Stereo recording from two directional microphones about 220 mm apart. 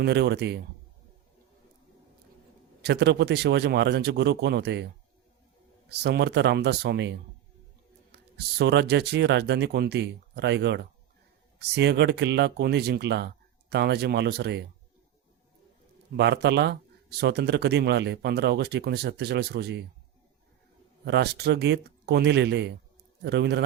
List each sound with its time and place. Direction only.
0.0 s speech: 50° right (ahead or behind)
2.8 s speech: 50° right (ahead or behind)
5.9 s speech: 50° right (ahead or behind)
8.1 s speech: 50° right (ahead or behind)
16.1 s speech: 50° right (ahead or behind)
21.0 s speech: 50° right (ahead or behind)